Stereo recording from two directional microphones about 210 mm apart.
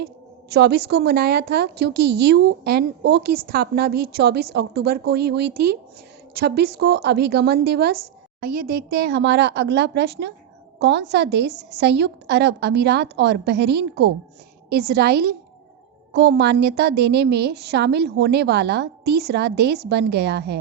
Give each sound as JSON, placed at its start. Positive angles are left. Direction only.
{"t": 0.5, "sound": "a woman's voice", "side_deg": -50}